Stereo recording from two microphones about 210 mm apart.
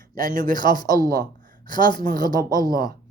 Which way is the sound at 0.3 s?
40° right (ahead or behind).